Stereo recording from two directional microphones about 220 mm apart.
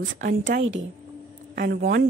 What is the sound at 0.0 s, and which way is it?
Speech, 35° right (ahead or behind).